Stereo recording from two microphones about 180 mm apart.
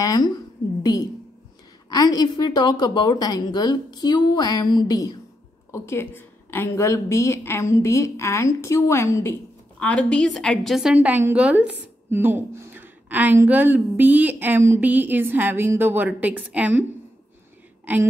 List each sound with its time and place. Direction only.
0.0 s a woman's voice: 20° left (ahead or behind)
1.9 s a woman's voice: 20° left (ahead or behind); by 16.8 s 10° right (ahead or behind)